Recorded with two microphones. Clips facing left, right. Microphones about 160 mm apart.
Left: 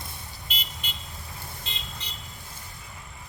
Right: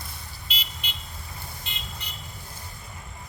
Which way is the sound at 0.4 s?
50° left (ahead or behind).